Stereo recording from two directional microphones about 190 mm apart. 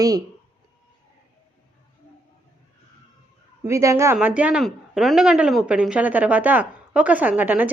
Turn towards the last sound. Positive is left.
turn(degrees=-10)  # may be behind; listen again after turning